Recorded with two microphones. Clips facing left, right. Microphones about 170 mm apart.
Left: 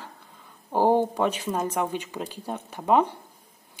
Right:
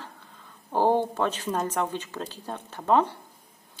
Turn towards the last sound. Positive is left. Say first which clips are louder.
# left 1 dB
turn(degrees=15)  # may be behind; listen again after turning